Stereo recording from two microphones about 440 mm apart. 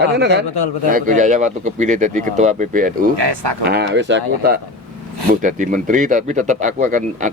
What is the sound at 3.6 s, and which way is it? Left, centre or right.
Speech, right.